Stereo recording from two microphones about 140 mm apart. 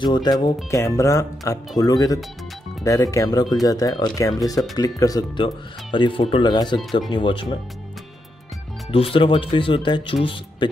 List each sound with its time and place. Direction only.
0.0 s speech: 30° left (ahead or behind)
5.4 s speech: 35° left (ahead or behind)
8.9 s speech: 40° left (ahead or behind)